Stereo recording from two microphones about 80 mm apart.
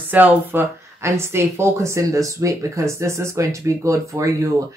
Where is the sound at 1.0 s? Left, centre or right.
Right.